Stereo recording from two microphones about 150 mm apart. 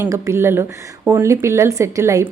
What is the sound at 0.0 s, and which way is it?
A woman's voice, 15° right (ahead or behind).